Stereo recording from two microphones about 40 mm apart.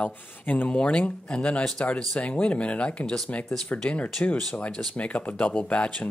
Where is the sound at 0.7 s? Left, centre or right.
Left.